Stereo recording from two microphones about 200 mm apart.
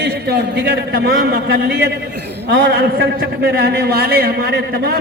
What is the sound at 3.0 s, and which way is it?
A man's voice, 50° right (ahead or behind).